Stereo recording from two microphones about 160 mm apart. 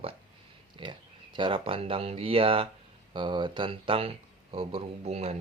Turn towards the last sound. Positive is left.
turn(degrees=-40)  # may be behind; listen again after turning